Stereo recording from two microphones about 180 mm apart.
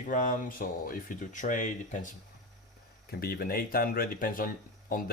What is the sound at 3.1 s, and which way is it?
Speech, 60° left (ahead or behind).